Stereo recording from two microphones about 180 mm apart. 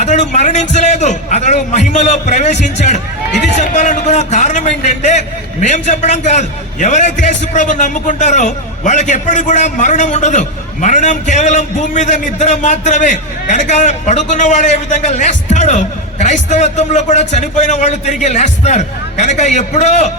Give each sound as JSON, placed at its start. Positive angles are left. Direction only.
{"t": 0.0, "sound": "a man's voice", "side_deg": 40}